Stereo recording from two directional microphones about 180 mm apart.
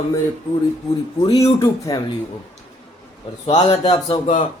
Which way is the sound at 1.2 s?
20° left (ahead or behind).